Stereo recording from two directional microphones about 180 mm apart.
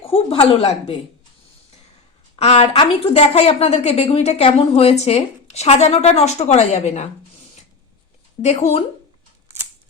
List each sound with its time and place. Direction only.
0.0 s a woman's voice: 30° left (ahead or behind)
2.3 s a woman's voice: 35° left (ahead or behind)
8.4 s a woman's voice: 40° left (ahead or behind)